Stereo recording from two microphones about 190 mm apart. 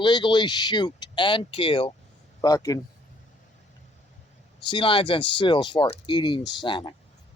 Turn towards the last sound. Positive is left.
turn(degrees=25)  # may be behind; listen again after turning